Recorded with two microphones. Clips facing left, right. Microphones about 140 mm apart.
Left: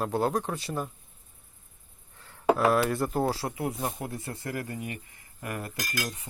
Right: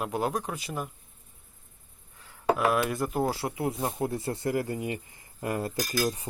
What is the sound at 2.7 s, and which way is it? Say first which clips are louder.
Speech: left 1 dB; 15° right (ahead or behind).